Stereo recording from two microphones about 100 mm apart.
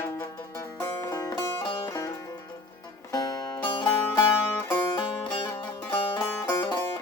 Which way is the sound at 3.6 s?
55° left (ahead or behind).